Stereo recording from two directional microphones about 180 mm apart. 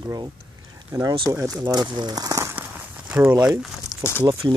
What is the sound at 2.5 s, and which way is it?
Walk, 5° right (ahead or behind).